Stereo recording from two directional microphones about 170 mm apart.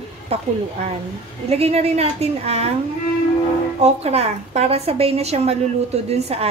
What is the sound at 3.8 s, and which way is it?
A woman's voice, 40° right (ahead or behind).